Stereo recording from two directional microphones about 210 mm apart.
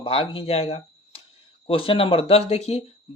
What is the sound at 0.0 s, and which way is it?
Speech, 25° left (ahead or behind).